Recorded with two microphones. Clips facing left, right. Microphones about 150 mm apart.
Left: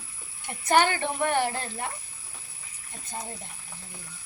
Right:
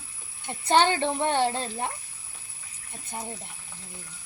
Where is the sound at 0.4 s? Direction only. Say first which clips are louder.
Right 1 dB; 25° right (ahead or behind).